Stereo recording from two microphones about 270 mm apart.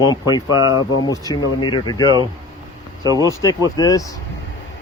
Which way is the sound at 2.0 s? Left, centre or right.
Centre.